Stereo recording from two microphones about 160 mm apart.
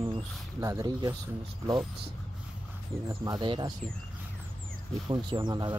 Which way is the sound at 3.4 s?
30° right (ahead or behind).